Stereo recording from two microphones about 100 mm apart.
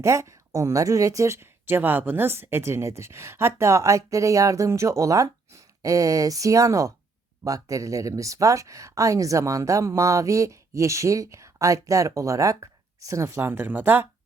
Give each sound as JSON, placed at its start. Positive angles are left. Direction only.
{"t": 0.0, "sound": "speech", "side_deg": -30}